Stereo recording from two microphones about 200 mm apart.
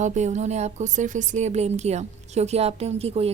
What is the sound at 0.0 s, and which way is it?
A woman's voice, 35° right (ahead or behind).